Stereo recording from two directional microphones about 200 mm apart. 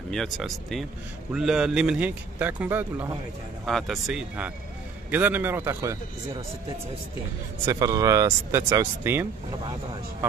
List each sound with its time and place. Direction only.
0.1 s a man's voice: centre (ahead or behind); by 5.9 s 15° right (ahead or behind)
7.6 s a man's voice: 15° right (ahead or behind)